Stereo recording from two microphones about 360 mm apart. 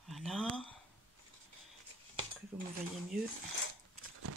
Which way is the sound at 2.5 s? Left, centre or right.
Centre.